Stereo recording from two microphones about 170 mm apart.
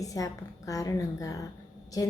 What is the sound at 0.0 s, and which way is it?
A woman's voice, 20° left (ahead or behind).